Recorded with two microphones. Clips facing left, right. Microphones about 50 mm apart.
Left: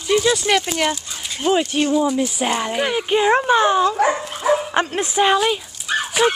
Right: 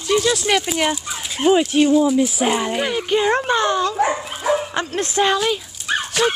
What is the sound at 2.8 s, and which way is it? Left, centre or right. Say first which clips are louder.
A woman's voice: left 3 dB; centre.